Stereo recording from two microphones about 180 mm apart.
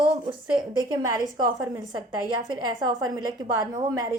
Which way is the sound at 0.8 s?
20° right (ahead or behind).